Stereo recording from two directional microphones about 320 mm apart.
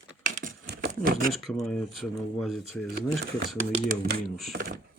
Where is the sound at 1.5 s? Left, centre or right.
Centre.